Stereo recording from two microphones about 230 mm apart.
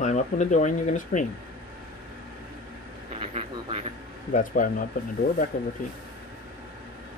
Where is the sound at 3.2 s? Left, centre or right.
Right.